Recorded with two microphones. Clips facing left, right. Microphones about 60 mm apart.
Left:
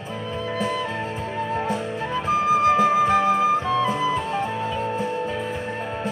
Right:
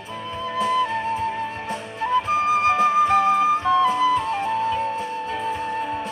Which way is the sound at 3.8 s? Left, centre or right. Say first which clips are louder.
Right 4 dB; left.